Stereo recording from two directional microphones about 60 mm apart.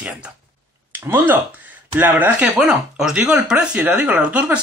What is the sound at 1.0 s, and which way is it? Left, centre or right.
Speech, right.